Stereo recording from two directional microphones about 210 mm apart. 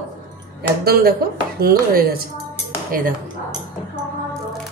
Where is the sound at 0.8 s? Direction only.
45° right (ahead or behind).